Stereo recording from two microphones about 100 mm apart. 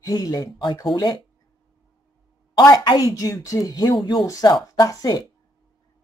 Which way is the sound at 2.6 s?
40° left (ahead or behind).